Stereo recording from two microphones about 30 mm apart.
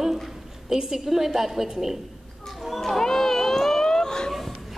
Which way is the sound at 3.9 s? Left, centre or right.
Left.